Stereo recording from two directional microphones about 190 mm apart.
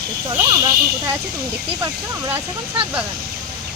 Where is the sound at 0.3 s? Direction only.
20° right (ahead or behind).